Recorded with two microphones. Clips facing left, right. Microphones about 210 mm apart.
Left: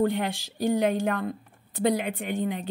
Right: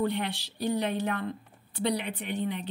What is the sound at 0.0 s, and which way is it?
A woman's voice, 45° left (ahead or behind).